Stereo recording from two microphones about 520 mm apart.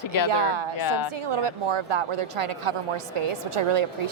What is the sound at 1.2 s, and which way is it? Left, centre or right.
Speech, right.